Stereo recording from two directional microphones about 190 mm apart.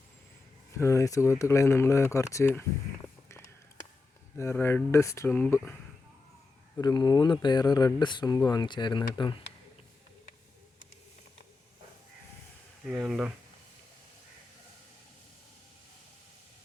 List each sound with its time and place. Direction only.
0.8 s speech: 15° left (ahead or behind)
4.4 s speech: 15° left (ahead or behind)
6.8 s speech: 20° left (ahead or behind)
13.0 s speech: 5° right (ahead or behind)